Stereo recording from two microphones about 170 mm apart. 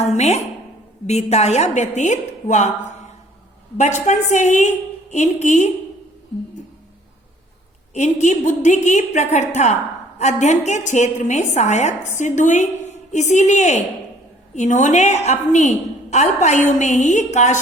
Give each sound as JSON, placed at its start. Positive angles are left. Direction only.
{"t": 0.0, "sound": "a woman's voice", "side_deg": 40}
{"t": 4.0, "sound": "a woman's voice", "side_deg": 45}
{"t": 7.9, "sound": "a woman's voice", "side_deg": 45}